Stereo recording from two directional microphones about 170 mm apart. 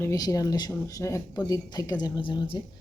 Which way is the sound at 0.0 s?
20° left (ahead or behind).